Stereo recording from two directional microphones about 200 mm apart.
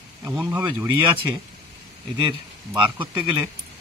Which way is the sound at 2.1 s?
20° right (ahead or behind).